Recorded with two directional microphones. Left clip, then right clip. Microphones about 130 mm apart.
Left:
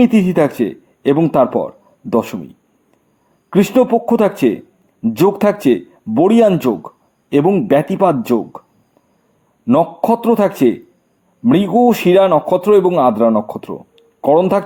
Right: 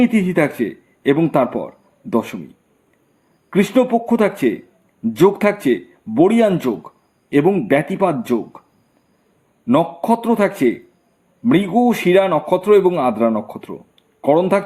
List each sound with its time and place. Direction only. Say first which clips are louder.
0.0 s speech: left 4 dB; 45° left (ahead or behind)
3.5 s speech: left 3 dB; 45° left (ahead or behind)
9.6 s speech: left 3 dB; 45° left (ahead or behind)